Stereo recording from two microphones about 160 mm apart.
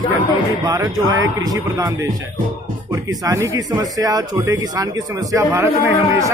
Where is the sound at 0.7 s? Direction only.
20° right (ahead or behind).